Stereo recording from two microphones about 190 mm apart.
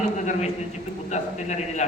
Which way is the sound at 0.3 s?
35° left (ahead or behind).